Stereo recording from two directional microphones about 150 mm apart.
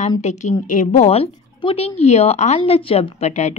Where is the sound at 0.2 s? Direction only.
50° left (ahead or behind).